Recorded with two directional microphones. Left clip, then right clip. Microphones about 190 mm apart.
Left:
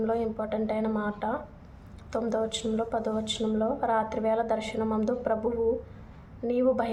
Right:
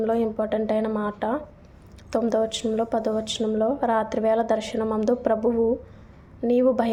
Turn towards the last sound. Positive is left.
turn(degrees=-25)  # may be behind; listen again after turning